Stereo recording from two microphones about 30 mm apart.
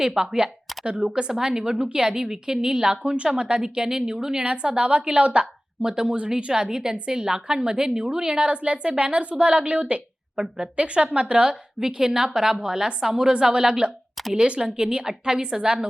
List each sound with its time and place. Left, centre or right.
0.0 s a woman's voice: centre
0.9 s a woman's voice: right
1.3 s a woman's voice: right
2.9 s a woman's voice: right
4.4 s a woman's voice: right
5.8 s a woman's voice: right
6.1 s a woman's voice: right
6.5 s a woman's voice: right
8.4 s a woman's voice: right
11.8 s a woman's voice: right